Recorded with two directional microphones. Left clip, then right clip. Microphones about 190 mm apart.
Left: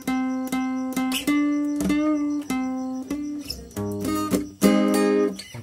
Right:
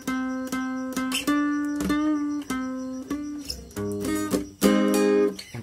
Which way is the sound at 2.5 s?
5° left (ahead or behind).